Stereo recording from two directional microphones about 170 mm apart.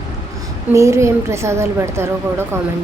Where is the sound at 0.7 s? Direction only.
15° right (ahead or behind).